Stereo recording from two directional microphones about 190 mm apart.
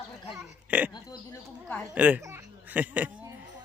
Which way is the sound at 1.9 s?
10° right (ahead or behind).